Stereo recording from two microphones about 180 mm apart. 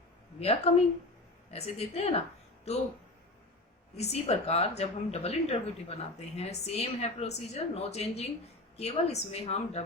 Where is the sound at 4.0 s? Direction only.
35° left (ahead or behind).